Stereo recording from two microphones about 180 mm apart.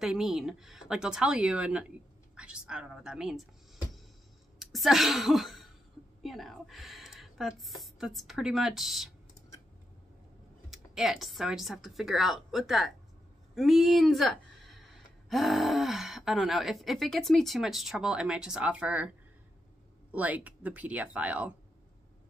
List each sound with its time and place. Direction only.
0.0 s a woman's voice: 5° right (ahead or behind)
10.7 s a woman's voice: centre (ahead or behind)